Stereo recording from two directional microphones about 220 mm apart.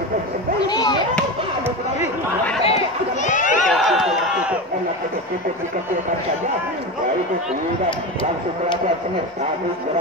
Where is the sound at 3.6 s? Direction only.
Centre (ahead or behind).